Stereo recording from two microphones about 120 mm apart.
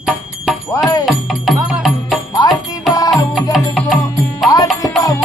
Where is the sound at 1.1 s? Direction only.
Centre (ahead or behind).